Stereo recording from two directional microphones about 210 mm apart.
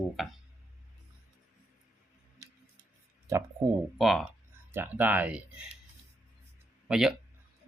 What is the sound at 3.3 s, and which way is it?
Speech, 15° right (ahead or behind).